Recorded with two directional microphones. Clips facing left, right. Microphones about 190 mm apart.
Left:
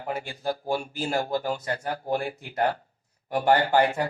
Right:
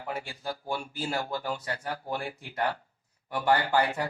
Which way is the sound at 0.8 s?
25° left (ahead or behind).